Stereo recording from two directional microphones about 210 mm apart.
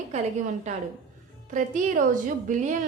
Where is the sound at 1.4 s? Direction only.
35° right (ahead or behind).